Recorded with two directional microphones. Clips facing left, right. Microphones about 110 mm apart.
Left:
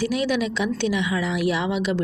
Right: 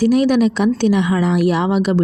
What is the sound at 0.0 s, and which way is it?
Speech, 45° right (ahead or behind).